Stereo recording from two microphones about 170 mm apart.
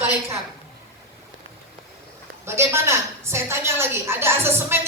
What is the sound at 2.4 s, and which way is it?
A woman's voice, 15° right (ahead or behind).